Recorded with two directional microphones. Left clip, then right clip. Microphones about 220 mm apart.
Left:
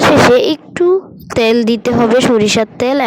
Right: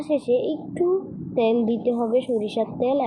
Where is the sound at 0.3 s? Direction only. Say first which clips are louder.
Left 13 dB; 50° left (ahead or behind).